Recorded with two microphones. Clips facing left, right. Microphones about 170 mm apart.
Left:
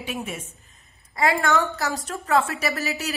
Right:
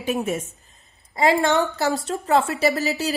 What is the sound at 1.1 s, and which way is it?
A woman's voice, 25° right (ahead or behind).